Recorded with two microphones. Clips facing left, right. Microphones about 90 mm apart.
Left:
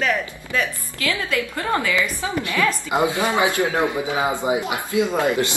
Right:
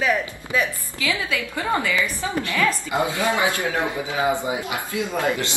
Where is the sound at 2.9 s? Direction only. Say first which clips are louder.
Left 2 dB; 20° left (ahead or behind).